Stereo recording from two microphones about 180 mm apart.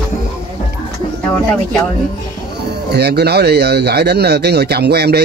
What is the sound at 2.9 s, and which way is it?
Speech, 65° right (ahead or behind).